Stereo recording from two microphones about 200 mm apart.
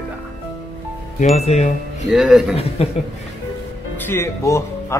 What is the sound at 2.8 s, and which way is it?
Speech, 30° left (ahead or behind).